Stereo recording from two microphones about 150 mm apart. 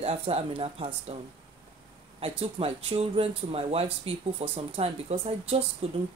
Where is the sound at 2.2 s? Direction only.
40° right (ahead or behind).